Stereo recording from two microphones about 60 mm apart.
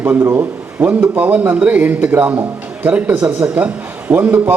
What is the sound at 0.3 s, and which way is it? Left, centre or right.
A man's voice, right.